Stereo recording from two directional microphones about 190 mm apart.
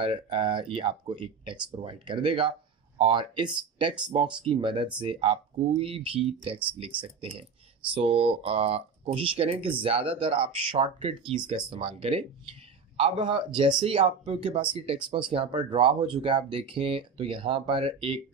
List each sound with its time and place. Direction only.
0.0 s speech: 25° right (ahead or behind)